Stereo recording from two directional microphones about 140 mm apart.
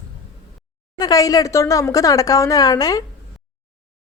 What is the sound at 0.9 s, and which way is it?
A woman's voice, 25° left (ahead or behind).